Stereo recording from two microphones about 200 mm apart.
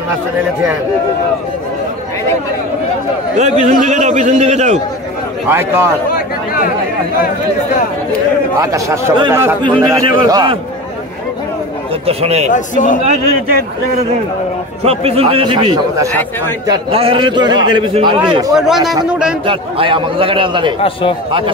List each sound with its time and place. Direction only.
3.3 s a man's voice: 35° right (ahead or behind)
5.5 s speech: 10° right (ahead or behind)
8.5 s a man's voice: 15° right (ahead or behind)
12.1 s a man's voice: 30° right (ahead or behind)
12.5 s a man's voice: 40° left (ahead or behind)
14.8 s a man's voice: 30° right (ahead or behind)
18.5 s a man's voice: centre (ahead or behind)
19.4 s a man's voice: 25° right (ahead or behind)